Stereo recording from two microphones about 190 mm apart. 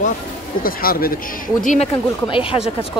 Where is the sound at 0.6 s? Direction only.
50° left (ahead or behind).